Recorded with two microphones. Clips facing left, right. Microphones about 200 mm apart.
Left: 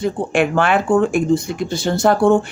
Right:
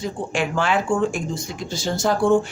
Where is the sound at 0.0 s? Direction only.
60° left (ahead or behind).